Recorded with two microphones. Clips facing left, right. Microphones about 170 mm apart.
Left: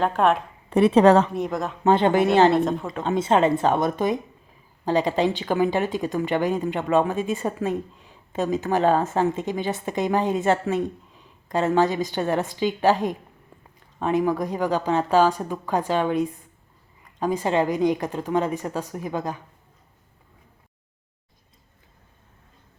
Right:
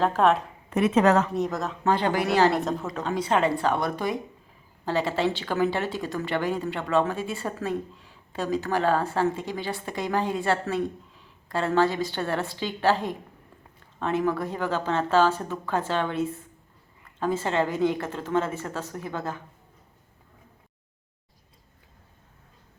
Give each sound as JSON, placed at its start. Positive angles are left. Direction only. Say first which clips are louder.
{"t": 0.0, "sound": "speech", "louder": "left 1 dB", "side_deg": 0}
{"t": 0.7, "sound": "a woman's voice", "louder": "left 5 dB", "side_deg": 30}
{"t": 1.3, "sound": "speech", "louder": "left 1 dB", "side_deg": 0}
{"t": 1.8, "sound": "speech", "louder": "left 6 dB", "side_deg": 20}
{"t": 2.6, "sound": "speech", "louder": "left 5 dB", "side_deg": 0}
{"t": 3.0, "sound": "a woman's voice", "louder": "left 5 dB", "side_deg": 20}